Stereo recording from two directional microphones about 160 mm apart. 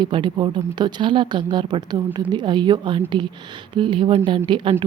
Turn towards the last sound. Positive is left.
turn(degrees=-30)  # may be behind; listen again after turning